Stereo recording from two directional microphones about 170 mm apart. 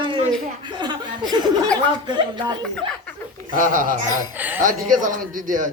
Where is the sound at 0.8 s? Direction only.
25° right (ahead or behind).